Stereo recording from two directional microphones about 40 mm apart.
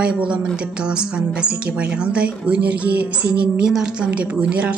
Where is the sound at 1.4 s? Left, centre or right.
Right.